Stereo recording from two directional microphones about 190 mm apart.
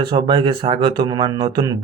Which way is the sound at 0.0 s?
25° right (ahead or behind).